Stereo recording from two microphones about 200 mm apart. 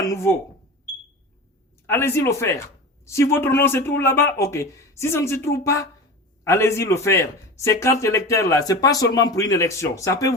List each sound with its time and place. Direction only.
0.0 s speech: 15° left (ahead or behind)
1.9 s a man's voice: 10° left (ahead or behind)